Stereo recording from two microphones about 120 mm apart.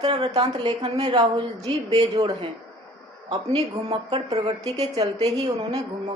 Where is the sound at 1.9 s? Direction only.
45° right (ahead or behind).